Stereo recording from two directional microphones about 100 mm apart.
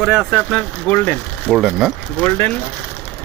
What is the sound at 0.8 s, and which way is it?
Speech, 20° left (ahead or behind).